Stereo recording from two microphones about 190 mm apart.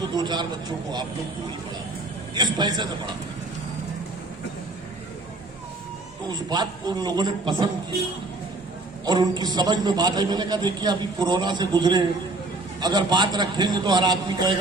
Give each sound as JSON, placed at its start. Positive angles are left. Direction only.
{"t": 0.1, "sound": "a man's voice", "side_deg": -25}
{"t": 2.3, "sound": "a man's voice", "side_deg": -20}
{"t": 6.2, "sound": "a man's voice", "side_deg": -20}
{"t": 9.0, "sound": "a man's voice", "side_deg": -20}